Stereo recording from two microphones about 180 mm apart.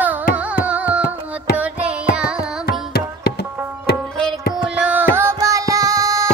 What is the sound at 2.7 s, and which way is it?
Music, 60° left (ahead or behind).